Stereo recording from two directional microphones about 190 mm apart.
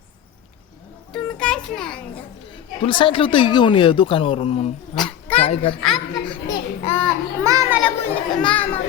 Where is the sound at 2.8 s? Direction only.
25° left (ahead or behind).